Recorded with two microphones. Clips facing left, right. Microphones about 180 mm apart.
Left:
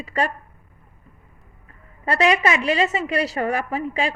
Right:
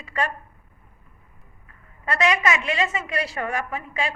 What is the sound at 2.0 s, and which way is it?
A woman's voice, 30° left (ahead or behind).